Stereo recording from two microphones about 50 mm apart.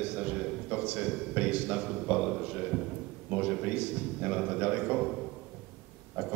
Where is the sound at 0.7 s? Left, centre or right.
Right.